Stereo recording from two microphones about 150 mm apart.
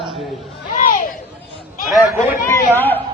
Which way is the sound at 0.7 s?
65° left (ahead or behind).